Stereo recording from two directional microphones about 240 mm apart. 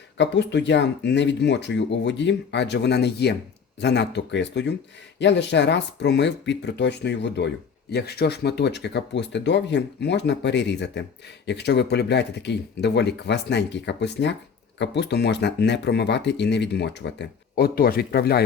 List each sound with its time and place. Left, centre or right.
0.2 s speech: left